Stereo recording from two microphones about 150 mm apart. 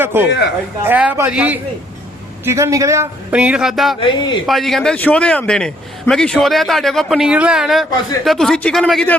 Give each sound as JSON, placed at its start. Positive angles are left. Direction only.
{"t": 0.0, "sound": "speech", "side_deg": -15}
{"t": 2.4, "sound": "speech", "side_deg": -20}
{"t": 4.0, "sound": "speech", "side_deg": 30}
{"t": 4.4, "sound": "a man's voice", "side_deg": 0}